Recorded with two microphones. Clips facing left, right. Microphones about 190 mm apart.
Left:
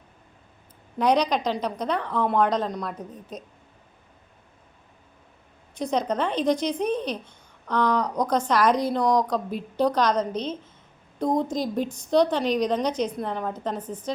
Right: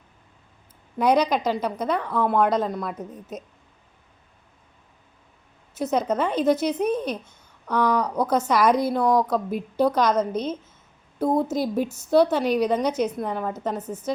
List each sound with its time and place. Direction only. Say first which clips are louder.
0.9 s speech: right 2 dB; 10° right (ahead or behind)
5.7 s speech: right 2 dB; 5° right (ahead or behind)